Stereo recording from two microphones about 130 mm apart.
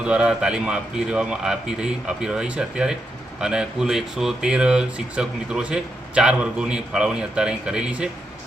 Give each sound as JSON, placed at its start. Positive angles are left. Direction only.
{"t": 0.0, "sound": "speech", "side_deg": -5}